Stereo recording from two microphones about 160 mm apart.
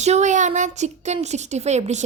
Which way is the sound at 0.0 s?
45° right (ahead or behind).